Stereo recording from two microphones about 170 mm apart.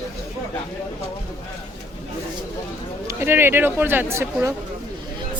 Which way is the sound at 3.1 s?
15° right (ahead or behind).